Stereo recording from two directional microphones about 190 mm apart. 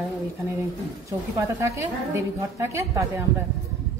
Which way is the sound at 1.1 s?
15° right (ahead or behind).